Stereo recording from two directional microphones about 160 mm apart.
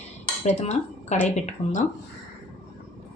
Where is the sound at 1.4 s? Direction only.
50° left (ahead or behind).